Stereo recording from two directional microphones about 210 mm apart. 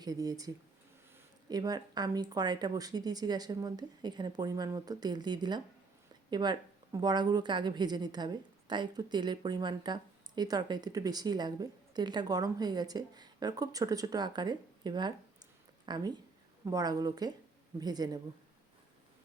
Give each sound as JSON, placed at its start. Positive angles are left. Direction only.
{"t": 0.0, "sound": "a woman's voice", "side_deg": -15}